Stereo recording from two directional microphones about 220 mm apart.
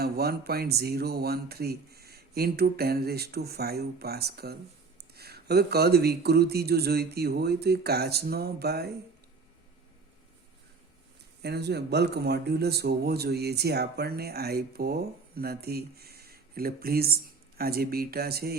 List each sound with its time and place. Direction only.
0.0 s speech: 45° right (ahead or behind)
11.4 s speech: 50° right (ahead or behind)